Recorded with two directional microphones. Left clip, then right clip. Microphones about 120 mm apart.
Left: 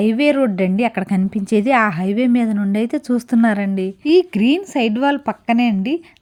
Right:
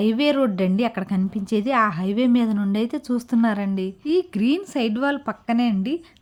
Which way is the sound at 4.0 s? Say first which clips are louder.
Left 8 dB; 45° left (ahead or behind).